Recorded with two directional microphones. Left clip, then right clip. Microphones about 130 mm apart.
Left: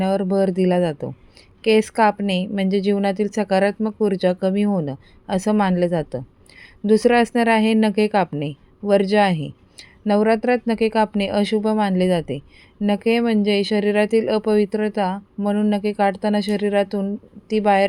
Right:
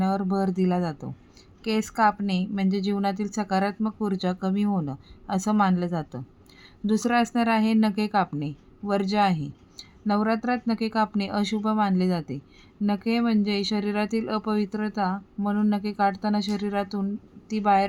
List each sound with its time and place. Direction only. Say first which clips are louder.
0.0 s a woman's voice: left 7 dB; 15° left (ahead or behind)